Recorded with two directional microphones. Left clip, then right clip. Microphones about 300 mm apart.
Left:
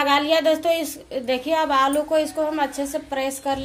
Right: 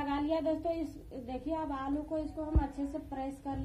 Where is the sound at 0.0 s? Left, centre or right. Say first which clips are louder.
Left 15 dB; left.